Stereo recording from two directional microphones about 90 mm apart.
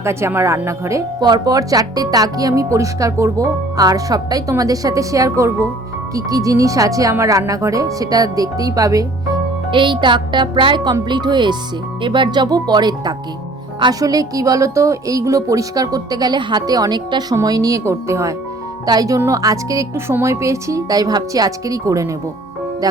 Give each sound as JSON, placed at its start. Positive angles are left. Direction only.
{"t": 0.0, "sound": "speech", "side_deg": -30}
{"t": 1.2, "sound": "speech", "side_deg": -45}
{"t": 9.7, "sound": "speech", "side_deg": -65}